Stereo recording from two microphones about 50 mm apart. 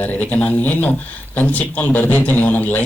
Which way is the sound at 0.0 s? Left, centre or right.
Left.